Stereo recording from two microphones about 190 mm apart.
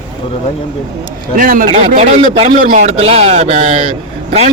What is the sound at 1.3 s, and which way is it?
Speech, 45° right (ahead or behind).